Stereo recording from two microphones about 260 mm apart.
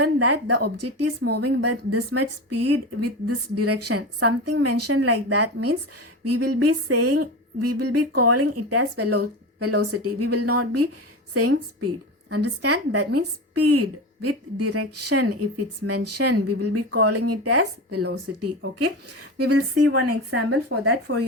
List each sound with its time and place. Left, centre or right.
0.0 s a woman's voice: right
19.4 s a woman's voice: right